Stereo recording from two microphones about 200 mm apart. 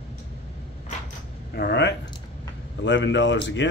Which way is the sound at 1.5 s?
55° left (ahead or behind).